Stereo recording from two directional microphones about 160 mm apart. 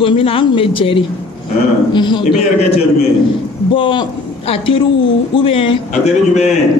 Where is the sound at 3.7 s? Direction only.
35° left (ahead or behind).